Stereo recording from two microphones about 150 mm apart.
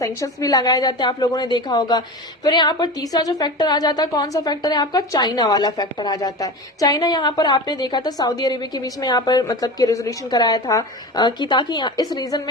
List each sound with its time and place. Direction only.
0.0 s a woman's voice: 20° left (ahead or behind)